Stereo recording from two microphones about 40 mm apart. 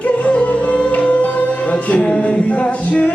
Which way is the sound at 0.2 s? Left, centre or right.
Left.